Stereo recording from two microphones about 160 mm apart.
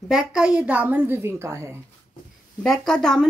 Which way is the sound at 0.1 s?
5° right (ahead or behind).